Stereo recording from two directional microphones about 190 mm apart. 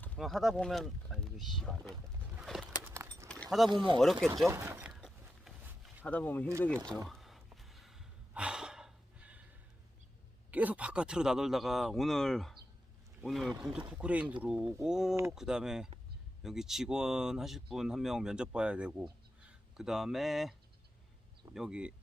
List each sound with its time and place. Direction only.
0.2 s speech: centre (ahead or behind)
2.3 s bird: 5° right (ahead or behind)
2.9 s keys jangling: 15° right (ahead or behind)
3.2 s keys jangling: centre (ahead or behind)
3.7 s speech: 25° right (ahead or behind)
4.0 s speech: centre (ahead or behind)
4.4 s a sound: 10° right (ahead or behind)
6.1 s speech: 10° left (ahead or behind)
7.1 s sigh: centre (ahead or behind)
10.5 s speech: 10° right (ahead or behind)